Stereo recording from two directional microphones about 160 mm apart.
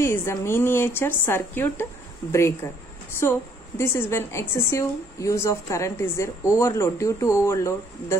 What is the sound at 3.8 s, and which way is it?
A woman's voice, 15° left (ahead or behind).